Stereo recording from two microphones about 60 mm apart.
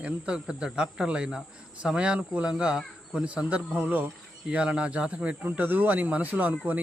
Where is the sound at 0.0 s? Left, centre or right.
Centre.